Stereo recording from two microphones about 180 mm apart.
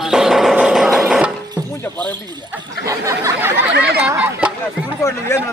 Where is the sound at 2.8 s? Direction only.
15° right (ahead or behind).